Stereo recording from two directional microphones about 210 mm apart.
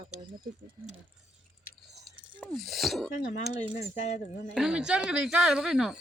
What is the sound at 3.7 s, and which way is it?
Speech, 35° left (ahead or behind).